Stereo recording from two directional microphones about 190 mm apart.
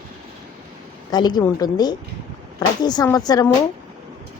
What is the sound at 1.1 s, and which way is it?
Speech, 20° left (ahead or behind).